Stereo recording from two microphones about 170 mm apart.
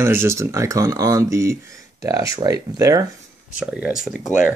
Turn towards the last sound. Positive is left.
turn(degrees=-5)  # may be behind; listen again after turning